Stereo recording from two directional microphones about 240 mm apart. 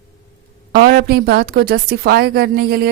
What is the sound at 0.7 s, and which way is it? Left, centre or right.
A woman's voice, right.